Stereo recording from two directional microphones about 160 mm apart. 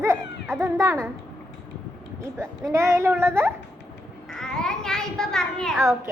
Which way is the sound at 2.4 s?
20° right (ahead or behind).